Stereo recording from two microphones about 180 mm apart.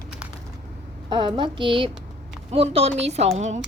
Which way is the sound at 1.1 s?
25° right (ahead or behind).